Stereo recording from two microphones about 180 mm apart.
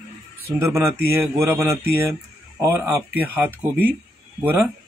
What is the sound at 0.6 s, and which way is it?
Speech, 15° right (ahead or behind).